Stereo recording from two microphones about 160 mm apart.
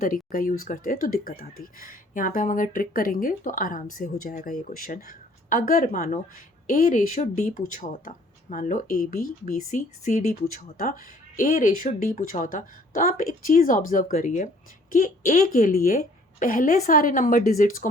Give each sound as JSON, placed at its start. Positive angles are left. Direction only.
{"t": 0.0, "sound": "speech", "side_deg": 60}
{"t": 10.4, "sound": "speech", "side_deg": 65}